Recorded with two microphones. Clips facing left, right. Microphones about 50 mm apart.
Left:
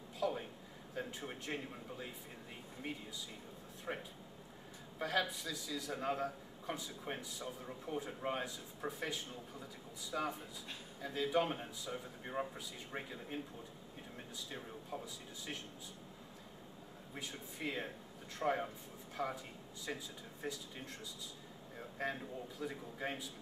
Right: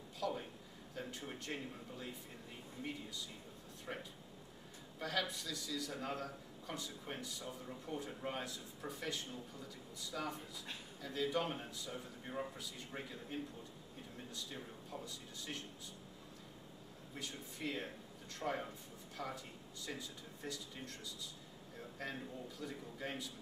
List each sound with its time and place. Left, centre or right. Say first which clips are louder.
0.2 s a sound: left 3 dB; centre
0.9 s a man's voice: left 3 dB; centre
3.9 s a man's voice: left 3 dB; left
10.1 s speech: left 4 dB; left
11.0 s a man's voice: left 3 dB; centre
17.1 s a man's voice: left 1 dB; centre